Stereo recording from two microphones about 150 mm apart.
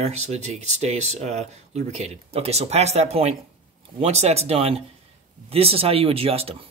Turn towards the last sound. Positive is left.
turn(degrees=-40)  # may be behind; listen again after turning